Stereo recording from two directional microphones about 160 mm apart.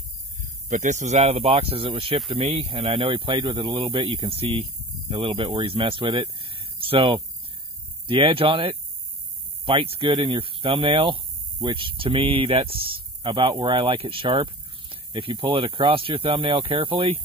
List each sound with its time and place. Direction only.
0.4 s speech: 50° right (ahead or behind); by 17.1 s 30° right (ahead or behind)